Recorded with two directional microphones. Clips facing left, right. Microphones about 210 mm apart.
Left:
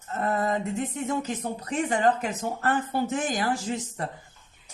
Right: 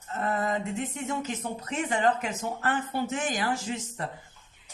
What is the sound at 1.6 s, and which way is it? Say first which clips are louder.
Speech: left 2 dB; 35° left (ahead or behind).